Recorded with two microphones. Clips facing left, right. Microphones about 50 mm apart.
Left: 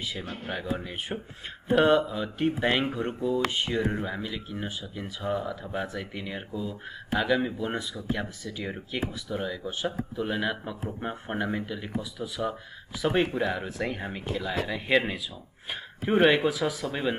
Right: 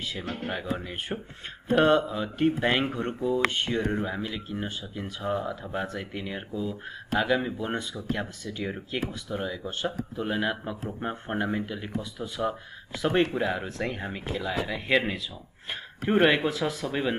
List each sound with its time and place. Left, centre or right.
0.2 s speech: right
0.5 s speech: centre
10.1 s speech: centre